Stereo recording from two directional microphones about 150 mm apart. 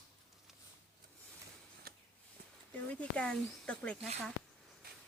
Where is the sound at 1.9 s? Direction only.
90° right.